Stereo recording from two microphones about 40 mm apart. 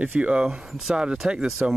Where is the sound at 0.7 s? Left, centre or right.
Centre.